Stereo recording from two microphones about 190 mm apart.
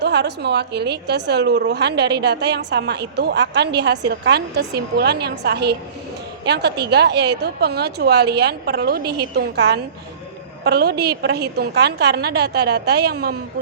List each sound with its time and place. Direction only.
0.0 s a woman's voice: 65° right (ahead or behind)